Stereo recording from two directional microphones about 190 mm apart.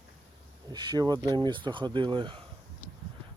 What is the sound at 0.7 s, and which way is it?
Speech, 20° right (ahead or behind).